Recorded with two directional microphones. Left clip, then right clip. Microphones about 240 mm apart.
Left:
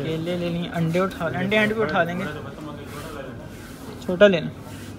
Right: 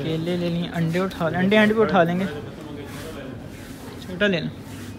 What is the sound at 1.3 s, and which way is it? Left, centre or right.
Speech, right.